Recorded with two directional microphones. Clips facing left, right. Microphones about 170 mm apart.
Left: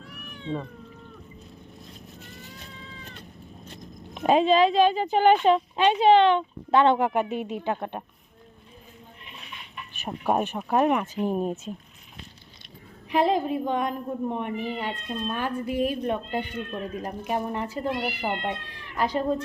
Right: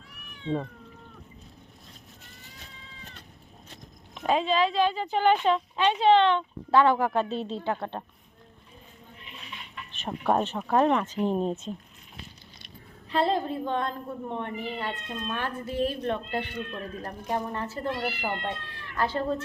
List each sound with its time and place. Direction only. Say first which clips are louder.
4.1 s speech: left 5 dB; 20° left (ahead or behind)
9.9 s speech: even; 10° left (ahead or behind)
13.1 s speech: left 3 dB; 15° left (ahead or behind)